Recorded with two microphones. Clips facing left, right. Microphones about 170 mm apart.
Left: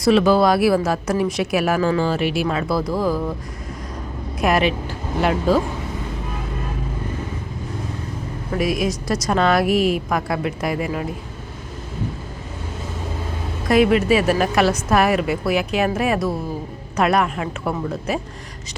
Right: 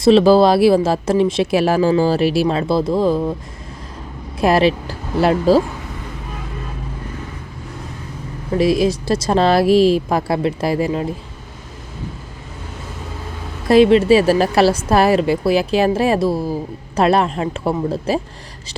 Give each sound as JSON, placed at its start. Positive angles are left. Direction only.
{"t": 0.0, "sound": "speech", "side_deg": -30}
{"t": 4.4, "sound": "speech", "side_deg": -30}
{"t": 8.5, "sound": "speech", "side_deg": -30}
{"t": 13.7, "sound": "a woman's voice", "side_deg": -30}